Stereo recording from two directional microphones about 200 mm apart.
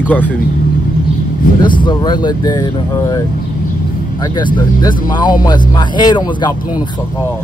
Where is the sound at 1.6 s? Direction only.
20° left (ahead or behind).